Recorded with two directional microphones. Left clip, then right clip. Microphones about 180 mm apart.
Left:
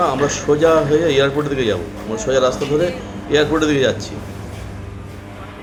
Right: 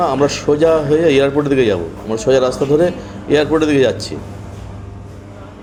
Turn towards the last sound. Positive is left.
turn(degrees=-30)  # may be behind; listen again after turning